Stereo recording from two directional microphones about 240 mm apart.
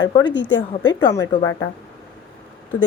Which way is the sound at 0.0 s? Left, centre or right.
Centre.